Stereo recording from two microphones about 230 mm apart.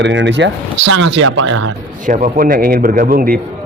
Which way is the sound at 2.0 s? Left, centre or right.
Right.